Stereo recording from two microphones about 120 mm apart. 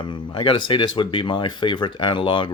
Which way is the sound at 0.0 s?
40° left (ahead or behind).